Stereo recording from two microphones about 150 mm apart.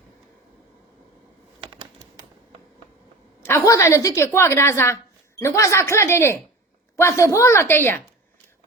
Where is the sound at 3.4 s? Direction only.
15° left (ahead or behind).